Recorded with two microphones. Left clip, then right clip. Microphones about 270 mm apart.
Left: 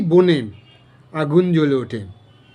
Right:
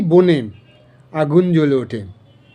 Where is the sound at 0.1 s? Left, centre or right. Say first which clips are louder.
Right 2 dB; centre.